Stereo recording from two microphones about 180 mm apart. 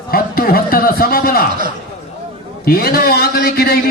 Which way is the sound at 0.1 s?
55° left (ahead or behind).